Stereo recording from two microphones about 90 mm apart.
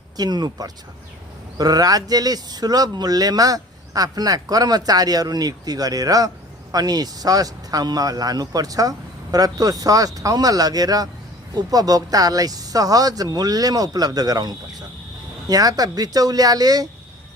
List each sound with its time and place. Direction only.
0.2 s speech: 50° right (ahead or behind)